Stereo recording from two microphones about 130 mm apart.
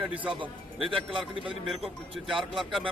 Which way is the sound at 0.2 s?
40° right (ahead or behind).